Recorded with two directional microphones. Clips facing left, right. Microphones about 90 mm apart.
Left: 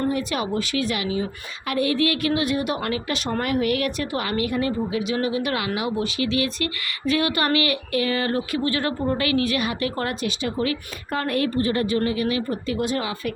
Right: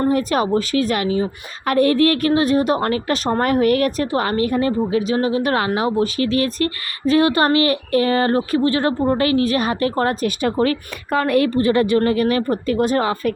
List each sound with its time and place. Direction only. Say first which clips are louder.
0.1 s a woman's voice: right 7 dB; 45° right (ahead or behind)
11.3 s a woman's voice: right 6 dB; 85° right
11.9 s speech: right 6 dB; 50° right (ahead or behind)